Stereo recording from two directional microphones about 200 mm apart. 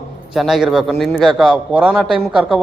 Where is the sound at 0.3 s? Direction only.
Centre (ahead or behind).